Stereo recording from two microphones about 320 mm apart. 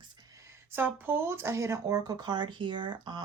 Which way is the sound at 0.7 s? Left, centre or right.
Centre.